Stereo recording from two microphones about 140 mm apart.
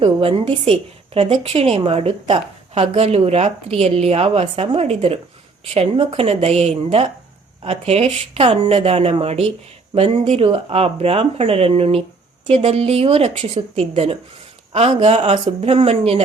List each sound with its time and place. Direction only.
0.0 s a woman's voice: 40° right (ahead or behind)